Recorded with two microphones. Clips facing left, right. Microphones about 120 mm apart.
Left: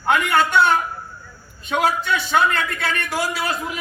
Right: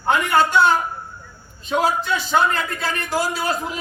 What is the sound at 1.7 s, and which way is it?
A man's voice, 30° right (ahead or behind).